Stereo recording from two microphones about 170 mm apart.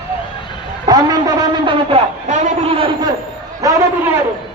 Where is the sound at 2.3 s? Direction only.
40° right (ahead or behind); by 3.8 s 20° right (ahead or behind).